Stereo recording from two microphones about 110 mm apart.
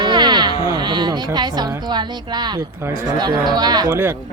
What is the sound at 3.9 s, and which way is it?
Speech, 25° right (ahead or behind).